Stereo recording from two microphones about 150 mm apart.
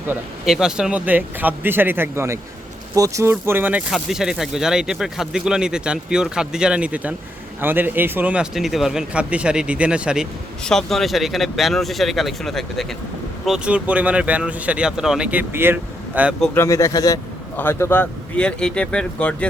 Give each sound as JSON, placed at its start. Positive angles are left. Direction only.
{"t": 0.4, "sound": "speech", "side_deg": -5}
{"t": 16.6, "sound": "speech", "side_deg": 20}